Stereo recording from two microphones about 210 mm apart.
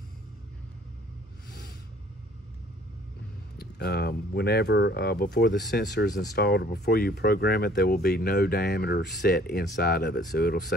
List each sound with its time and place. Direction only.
3.5 s speech: 50° left (ahead or behind)